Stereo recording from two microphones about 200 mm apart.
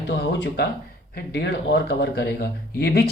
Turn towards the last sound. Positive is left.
turn(degrees=50)  # may be behind; listen again after turning